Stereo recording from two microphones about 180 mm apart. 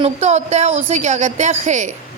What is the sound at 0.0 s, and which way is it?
A woman's voice, 35° right (ahead or behind).